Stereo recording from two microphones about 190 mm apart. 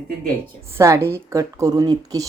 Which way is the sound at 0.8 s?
15° right (ahead or behind).